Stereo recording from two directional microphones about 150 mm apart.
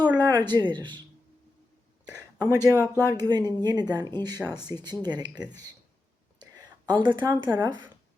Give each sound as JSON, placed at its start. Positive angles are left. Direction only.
{"t": 0.0, "sound": "speech", "side_deg": -25}
{"t": 2.1, "sound": "speech", "side_deg": -25}
{"t": 6.4, "sound": "whispering", "side_deg": -30}
{"t": 7.5, "sound": "speech", "side_deg": -25}